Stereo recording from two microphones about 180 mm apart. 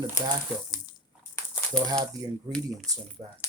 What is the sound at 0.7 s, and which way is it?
Water, 20° left (ahead or behind).